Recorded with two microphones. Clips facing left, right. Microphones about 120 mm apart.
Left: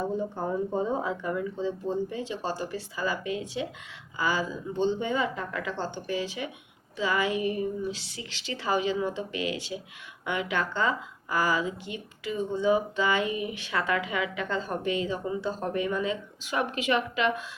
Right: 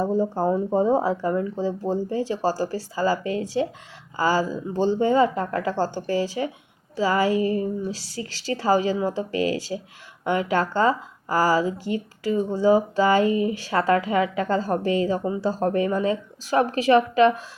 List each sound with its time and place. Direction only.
0.0 s a woman's voice: 35° right (ahead or behind)
7.3 s music: 20° left (ahead or behind)
7.6 s a woman's voice: 35° right (ahead or behind)
13.2 s speech: 15° left (ahead or behind)
13.5 s a woman's voice: 40° right (ahead or behind)